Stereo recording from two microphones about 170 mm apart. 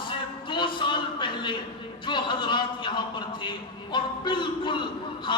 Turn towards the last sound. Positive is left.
turn(degrees=30)  # may be behind; listen again after turning